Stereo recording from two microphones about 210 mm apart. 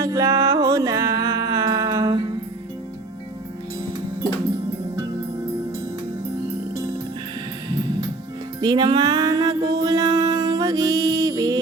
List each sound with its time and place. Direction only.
0.0 s music: 15° right (ahead or behind)
8.6 s music: 20° right (ahead or behind)